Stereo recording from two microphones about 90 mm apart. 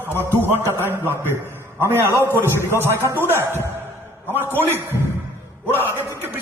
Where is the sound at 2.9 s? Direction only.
30° right (ahead or behind).